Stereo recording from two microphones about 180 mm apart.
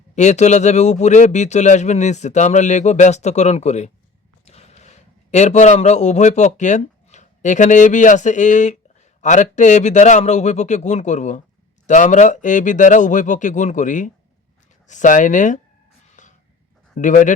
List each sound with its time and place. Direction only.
0.2 s a man's voice: 40° left (ahead or behind)
16.2 s a sound: 40° left (ahead or behind)
17.0 s speech: 45° left (ahead or behind)